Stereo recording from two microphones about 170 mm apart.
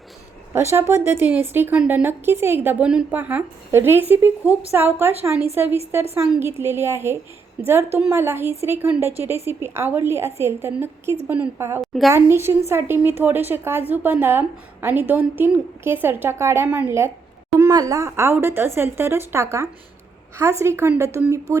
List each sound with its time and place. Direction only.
0.5 s a woman's voice: 15° right (ahead or behind)
11.8 s a woman's voice: centre (ahead or behind)
12.1 s a woman's voice: 15° right (ahead or behind)